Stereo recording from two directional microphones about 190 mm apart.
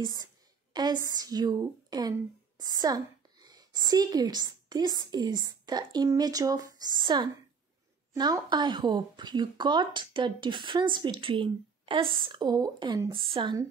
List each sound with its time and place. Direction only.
0.0 s a woman's voice: 20° right (ahead or behind)